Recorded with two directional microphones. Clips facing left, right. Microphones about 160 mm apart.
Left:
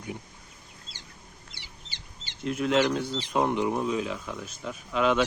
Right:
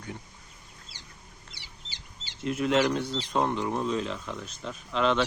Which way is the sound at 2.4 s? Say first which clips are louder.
Even; centre (ahead or behind).